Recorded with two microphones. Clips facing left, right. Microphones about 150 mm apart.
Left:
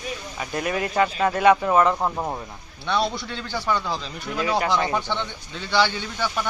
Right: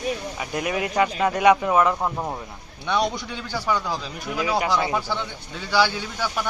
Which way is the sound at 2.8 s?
15° right (ahead or behind).